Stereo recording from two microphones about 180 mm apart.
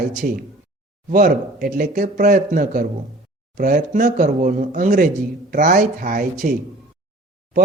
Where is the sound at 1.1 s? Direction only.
50° right (ahead or behind).